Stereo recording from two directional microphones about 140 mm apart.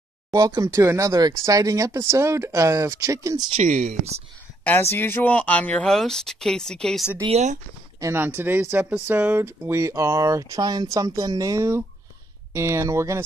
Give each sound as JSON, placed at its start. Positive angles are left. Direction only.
{"t": 0.3, "sound": "speech", "side_deg": -25}
{"t": 3.6, "sound": "speech", "side_deg": -60}
{"t": 4.6, "sound": "speech", "side_deg": 15}
{"t": 7.2, "sound": "speech", "side_deg": -50}
{"t": 8.0, "sound": "speech", "side_deg": -15}